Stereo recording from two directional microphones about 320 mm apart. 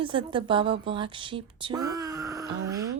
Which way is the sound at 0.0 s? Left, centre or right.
Centre.